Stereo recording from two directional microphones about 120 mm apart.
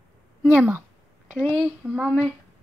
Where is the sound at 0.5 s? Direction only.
20° right (ahead or behind).